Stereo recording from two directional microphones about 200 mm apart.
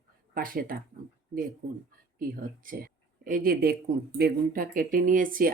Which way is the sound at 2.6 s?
45° right (ahead or behind).